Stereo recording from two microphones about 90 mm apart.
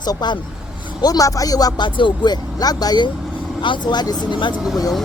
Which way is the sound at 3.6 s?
60° left (ahead or behind).